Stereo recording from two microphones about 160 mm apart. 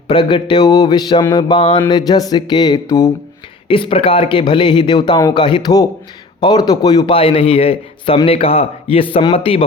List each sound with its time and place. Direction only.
0.1 s speech: 30° left (ahead or behind)
3.7 s a man's voice: 35° left (ahead or behind)